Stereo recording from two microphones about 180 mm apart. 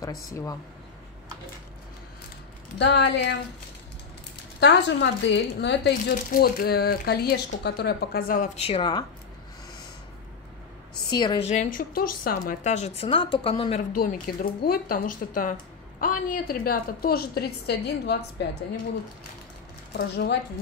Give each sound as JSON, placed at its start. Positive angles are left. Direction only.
{"t": 0.3, "sound": "speech", "side_deg": 20}
{"t": 2.8, "sound": "a woman's voice", "side_deg": 70}
{"t": 4.6, "sound": "a woman's voice", "side_deg": 75}
{"t": 6.3, "sound": "a woman's voice", "side_deg": 60}
{"t": 8.5, "sound": "speech", "side_deg": 35}
{"t": 11.1, "sound": "a woman's voice", "side_deg": 25}
{"t": 11.4, "sound": "speech", "side_deg": 40}
{"t": 13.9, "sound": "a woman's voice", "side_deg": 50}
{"t": 20.0, "sound": "a woman's voice", "side_deg": 70}